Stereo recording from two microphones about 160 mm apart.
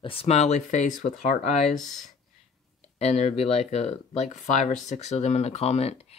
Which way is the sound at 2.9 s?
45° left (ahead or behind).